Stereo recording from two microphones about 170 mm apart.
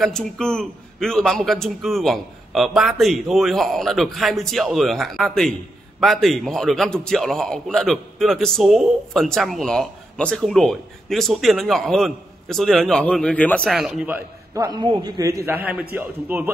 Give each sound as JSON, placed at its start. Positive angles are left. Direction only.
{"t": 0.0, "sound": "a man's voice", "side_deg": 5}
{"t": 14.6, "sound": "a man's voice", "side_deg": -25}